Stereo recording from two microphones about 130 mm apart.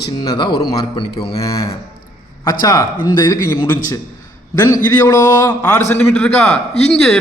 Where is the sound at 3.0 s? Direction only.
25° left (ahead or behind).